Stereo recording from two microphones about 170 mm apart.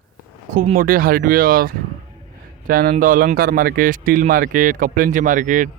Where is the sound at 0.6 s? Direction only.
55° right (ahead or behind).